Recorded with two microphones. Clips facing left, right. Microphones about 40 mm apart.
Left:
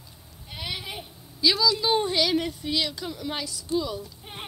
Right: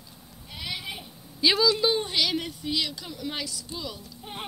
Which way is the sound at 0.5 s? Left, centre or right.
Left.